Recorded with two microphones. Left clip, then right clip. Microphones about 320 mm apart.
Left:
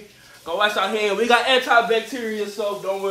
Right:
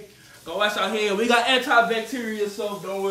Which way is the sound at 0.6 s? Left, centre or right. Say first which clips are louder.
Left 2 dB; centre.